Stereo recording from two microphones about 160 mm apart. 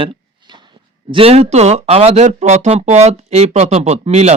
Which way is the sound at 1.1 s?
40° right (ahead or behind).